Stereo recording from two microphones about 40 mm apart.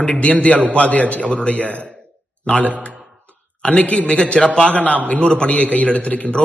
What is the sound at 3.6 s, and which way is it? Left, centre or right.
A man's voice, left.